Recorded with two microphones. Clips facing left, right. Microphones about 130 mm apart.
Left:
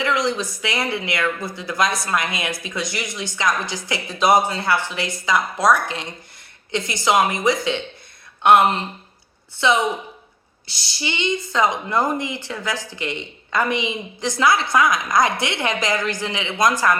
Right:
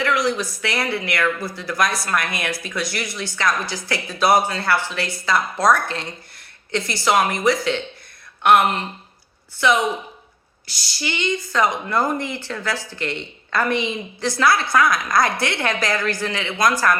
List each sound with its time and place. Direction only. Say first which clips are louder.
0.0 s speech: right 1 dB; 20° left (ahead or behind)